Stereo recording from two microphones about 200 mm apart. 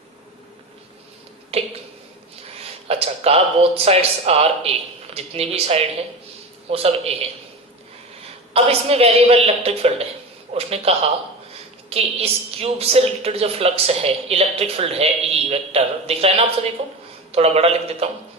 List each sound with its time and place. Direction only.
1.5 s a sound: 30° right (ahead or behind)
2.8 s a woman's voice: 30° right (ahead or behind)
8.5 s a woman's voice: 30° right (ahead or behind)